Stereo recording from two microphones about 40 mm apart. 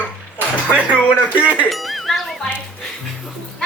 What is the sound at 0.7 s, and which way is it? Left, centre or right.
Speech, right.